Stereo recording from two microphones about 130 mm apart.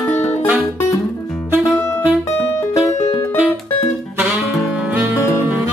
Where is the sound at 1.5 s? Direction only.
10° right (ahead or behind).